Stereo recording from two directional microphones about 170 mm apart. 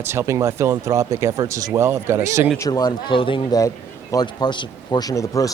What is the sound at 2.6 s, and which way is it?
A man's voice, 20° left (ahead or behind).